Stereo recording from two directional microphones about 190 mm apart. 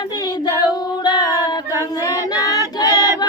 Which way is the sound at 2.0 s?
20° left (ahead or behind).